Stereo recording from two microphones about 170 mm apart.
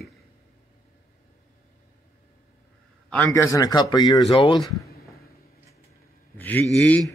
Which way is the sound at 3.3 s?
20° left (ahead or behind).